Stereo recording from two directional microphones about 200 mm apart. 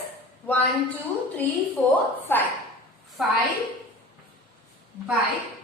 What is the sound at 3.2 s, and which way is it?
Speech, centre (ahead or behind).